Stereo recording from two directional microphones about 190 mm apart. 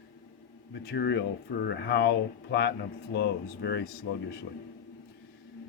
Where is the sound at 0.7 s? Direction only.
60° left (ahead or behind).